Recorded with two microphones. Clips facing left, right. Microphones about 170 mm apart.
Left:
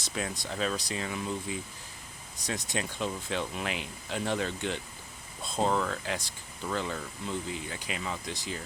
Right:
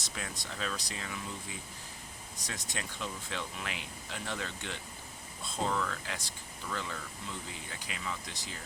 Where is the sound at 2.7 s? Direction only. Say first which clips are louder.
Left 6 dB; 20° left (ahead or behind).